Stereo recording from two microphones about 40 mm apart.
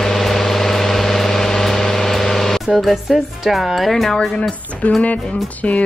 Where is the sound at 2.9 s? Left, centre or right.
Centre.